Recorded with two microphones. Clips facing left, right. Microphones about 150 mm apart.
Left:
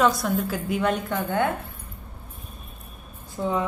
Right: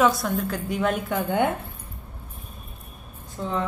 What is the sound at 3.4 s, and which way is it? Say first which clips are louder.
Speech: left 4 dB; 10° left (ahead or behind).